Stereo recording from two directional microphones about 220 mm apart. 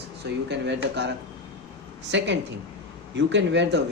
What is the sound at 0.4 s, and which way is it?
Speech, 50° right (ahead or behind).